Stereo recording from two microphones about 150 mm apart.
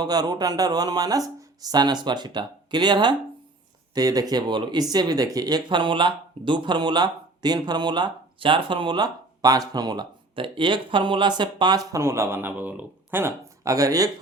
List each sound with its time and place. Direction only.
0.0 s speech: 25° right (ahead or behind)